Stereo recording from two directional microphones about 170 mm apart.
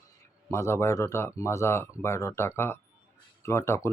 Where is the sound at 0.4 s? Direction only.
15° left (ahead or behind).